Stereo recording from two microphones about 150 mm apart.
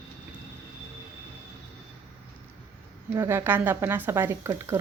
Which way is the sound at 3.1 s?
20° right (ahead or behind).